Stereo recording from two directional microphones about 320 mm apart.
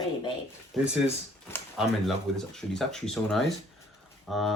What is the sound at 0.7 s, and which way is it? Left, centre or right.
Speech, centre.